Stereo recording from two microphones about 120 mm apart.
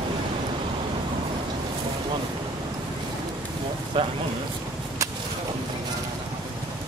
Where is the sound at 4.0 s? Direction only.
45° right (ahead or behind).